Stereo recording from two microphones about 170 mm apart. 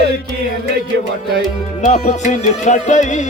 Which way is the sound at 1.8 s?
45° left (ahead or behind).